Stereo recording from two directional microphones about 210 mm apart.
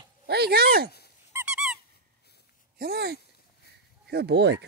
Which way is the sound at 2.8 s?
50° right (ahead or behind).